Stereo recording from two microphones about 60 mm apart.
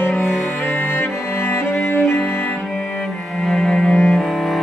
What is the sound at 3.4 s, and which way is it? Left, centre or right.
Cello, centre.